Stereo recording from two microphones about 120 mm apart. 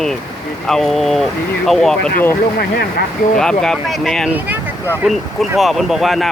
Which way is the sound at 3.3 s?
5° left (ahead or behind).